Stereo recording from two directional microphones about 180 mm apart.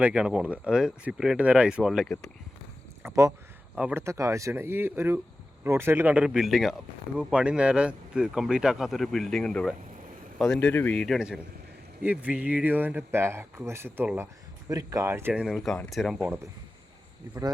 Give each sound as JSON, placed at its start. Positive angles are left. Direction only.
{"t": 0.0, "sound": "speech", "side_deg": -5}
{"t": 3.0, "sound": "speech", "side_deg": -15}